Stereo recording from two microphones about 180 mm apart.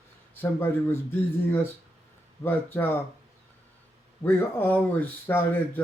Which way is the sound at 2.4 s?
10° left (ahead or behind).